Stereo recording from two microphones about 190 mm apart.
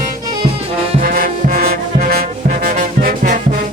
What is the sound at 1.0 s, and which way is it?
Music, 50° right (ahead or behind).